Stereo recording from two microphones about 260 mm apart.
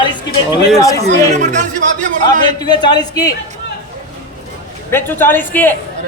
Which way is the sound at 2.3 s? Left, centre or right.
Centre.